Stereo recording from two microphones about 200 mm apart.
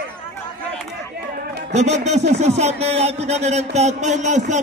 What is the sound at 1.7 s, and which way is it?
Speech, 35° right (ahead or behind).